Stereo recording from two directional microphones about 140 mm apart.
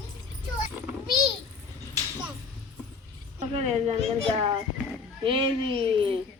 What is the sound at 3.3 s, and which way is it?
Speech, 55° right (ahead or behind).